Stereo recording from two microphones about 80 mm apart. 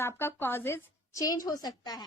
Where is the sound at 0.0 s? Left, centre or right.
Left.